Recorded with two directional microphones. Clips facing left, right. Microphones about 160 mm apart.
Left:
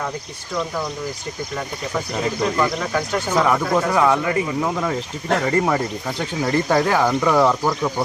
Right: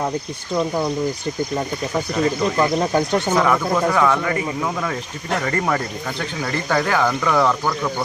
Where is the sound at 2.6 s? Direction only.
30° right (ahead or behind).